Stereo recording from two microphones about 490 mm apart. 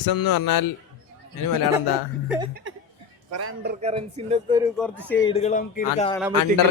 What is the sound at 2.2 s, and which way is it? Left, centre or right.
Speech, centre.